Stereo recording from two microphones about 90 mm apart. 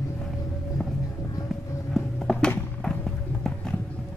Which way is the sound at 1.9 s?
5° left (ahead or behind).